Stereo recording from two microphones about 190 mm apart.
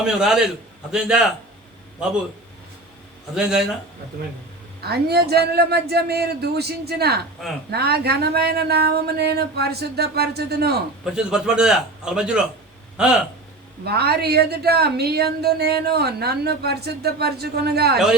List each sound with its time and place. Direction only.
0.0 s a man's voice: 5° right (ahead or behind)
3.3 s a man's voice: 5° right (ahead or behind)
4.8 s a woman's voice: 55° right (ahead or behind)
11.0 s a man's voice: 5° right (ahead or behind)
13.8 s a woman's voice: 55° right (ahead or behind)